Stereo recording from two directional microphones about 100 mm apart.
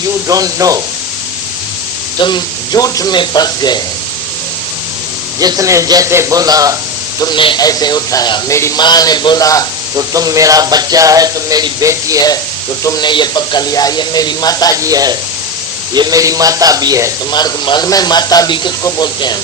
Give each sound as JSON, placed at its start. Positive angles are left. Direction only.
{"t": 0.3, "sound": "speech", "side_deg": -35}
{"t": 2.2, "sound": "speech", "side_deg": 45}
{"t": 5.4, "sound": "speech", "side_deg": -35}
{"t": 7.2, "sound": "speech", "side_deg": 50}
{"t": 7.6, "sound": "speech", "side_deg": 40}
{"t": 9.9, "sound": "speech", "side_deg": -35}
{"t": 13.0, "sound": "speech", "side_deg": 50}
{"t": 14.8, "sound": "speech", "side_deg": -35}
{"t": 17.3, "sound": "speech", "side_deg": 45}